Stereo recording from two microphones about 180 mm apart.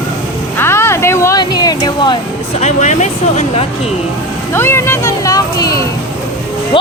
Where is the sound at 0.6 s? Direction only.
15° left (ahead or behind).